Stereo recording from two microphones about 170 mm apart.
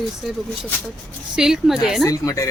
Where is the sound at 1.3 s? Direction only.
5° right (ahead or behind).